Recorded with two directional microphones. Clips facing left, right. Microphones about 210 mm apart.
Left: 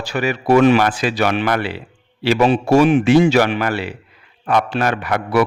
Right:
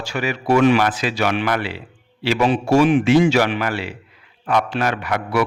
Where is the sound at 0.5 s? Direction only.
40° left (ahead or behind).